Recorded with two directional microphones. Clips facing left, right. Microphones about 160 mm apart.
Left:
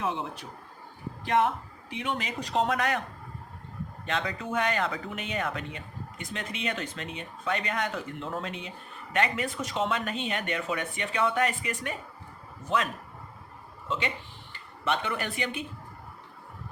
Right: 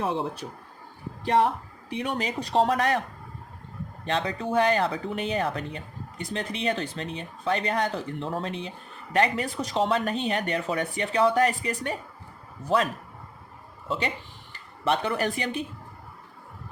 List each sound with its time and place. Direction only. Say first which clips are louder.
2.0 s speech: right 3 dB; 35° right (ahead or behind)
4.0 s speech: right 4 dB; 35° right (ahead or behind)